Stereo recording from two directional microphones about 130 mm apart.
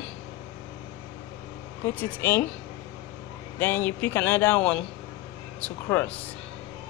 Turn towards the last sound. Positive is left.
turn(degrees=15)  # may be behind; listen again after turning